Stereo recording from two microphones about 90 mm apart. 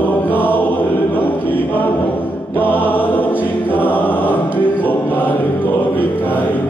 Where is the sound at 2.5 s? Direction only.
20° left (ahead or behind).